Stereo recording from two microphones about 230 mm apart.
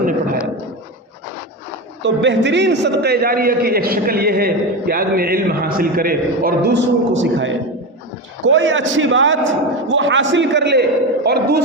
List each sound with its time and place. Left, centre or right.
2.0 s a man's voice: right